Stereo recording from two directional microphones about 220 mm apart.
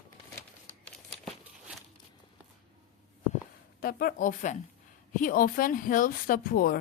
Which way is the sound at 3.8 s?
40° left (ahead or behind).